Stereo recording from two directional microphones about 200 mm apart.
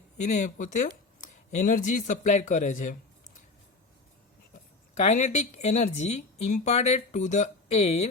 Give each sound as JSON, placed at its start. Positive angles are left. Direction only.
{"t": 0.2, "sound": "speech", "side_deg": 35}
{"t": 4.9, "sound": "speech", "side_deg": 35}